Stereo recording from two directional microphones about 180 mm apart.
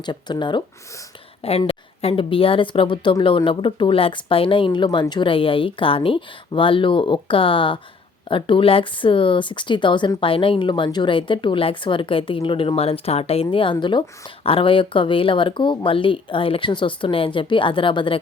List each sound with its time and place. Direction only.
0.0 s speech: 25° left (ahead or behind)